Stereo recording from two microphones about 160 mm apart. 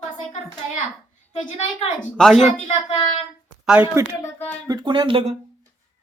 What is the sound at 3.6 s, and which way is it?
Speech, 10° right (ahead or behind).